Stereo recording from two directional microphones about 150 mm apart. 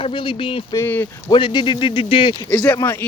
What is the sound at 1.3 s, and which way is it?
Speech, 30° left (ahead or behind).